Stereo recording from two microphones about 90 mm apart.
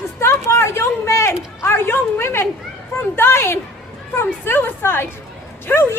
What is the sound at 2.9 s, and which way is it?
A woman's voice, 25° left (ahead or behind).